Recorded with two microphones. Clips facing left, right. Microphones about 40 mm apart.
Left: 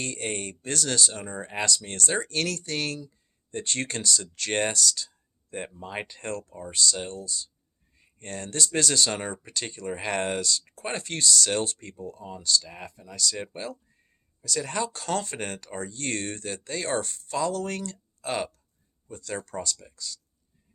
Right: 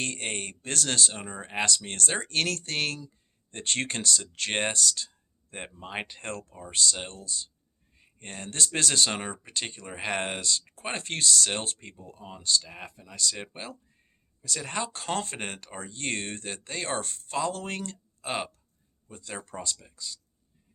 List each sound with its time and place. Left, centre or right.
0.0 s speech: right
7.9 s speech: right